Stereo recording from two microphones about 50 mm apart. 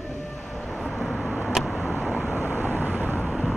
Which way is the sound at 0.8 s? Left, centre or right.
Centre.